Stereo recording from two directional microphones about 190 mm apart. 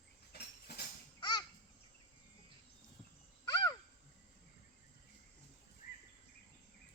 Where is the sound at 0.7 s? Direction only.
60° left (ahead or behind).